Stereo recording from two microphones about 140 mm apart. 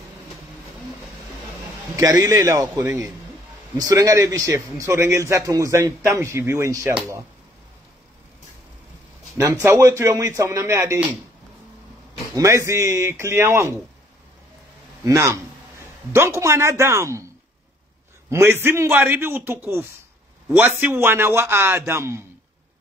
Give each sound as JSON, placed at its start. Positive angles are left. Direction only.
{"t": 2.0, "sound": "a man's voice", "side_deg": -25}
{"t": 9.4, "sound": "a man's voice", "side_deg": -20}
{"t": 12.4, "sound": "a man's voice", "side_deg": -20}
{"t": 15.0, "sound": "a man's voice", "side_deg": -20}
{"t": 18.3, "sound": "a man's voice", "side_deg": -20}